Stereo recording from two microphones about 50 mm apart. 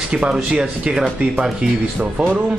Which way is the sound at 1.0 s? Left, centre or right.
Right.